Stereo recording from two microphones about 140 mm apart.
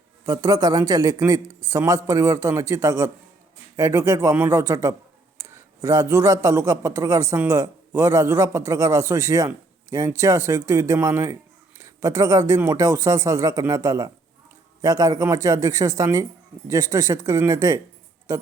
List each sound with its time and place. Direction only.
0.3 s speech: 25° right (ahead or behind)
5.4 s a sound: 20° right (ahead or behind)
5.8 s speech: 20° right (ahead or behind)